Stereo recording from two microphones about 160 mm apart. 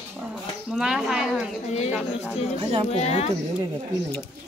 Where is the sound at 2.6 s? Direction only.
35° right (ahead or behind).